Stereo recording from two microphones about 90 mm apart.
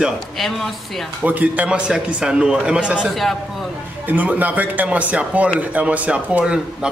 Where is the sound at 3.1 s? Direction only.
Centre (ahead or behind).